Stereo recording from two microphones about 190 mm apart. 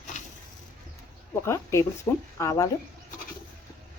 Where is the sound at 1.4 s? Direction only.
15° left (ahead or behind).